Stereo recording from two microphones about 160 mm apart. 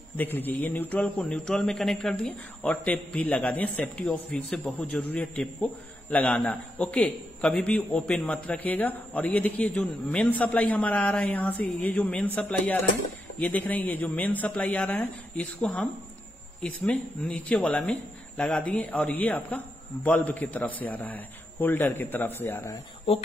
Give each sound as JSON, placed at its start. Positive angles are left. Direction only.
{"t": 0.2, "sound": "a man's voice", "side_deg": 10}